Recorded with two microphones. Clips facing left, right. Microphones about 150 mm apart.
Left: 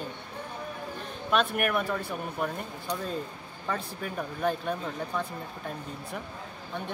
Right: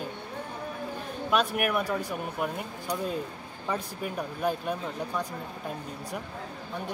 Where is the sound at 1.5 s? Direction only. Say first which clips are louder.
Right 1 dB; centre (ahead or behind).